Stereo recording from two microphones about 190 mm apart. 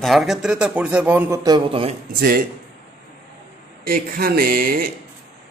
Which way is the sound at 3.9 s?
50° right (ahead or behind).